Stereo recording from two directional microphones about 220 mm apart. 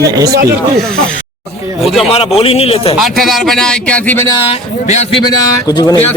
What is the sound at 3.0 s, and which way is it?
Speech, centre (ahead or behind).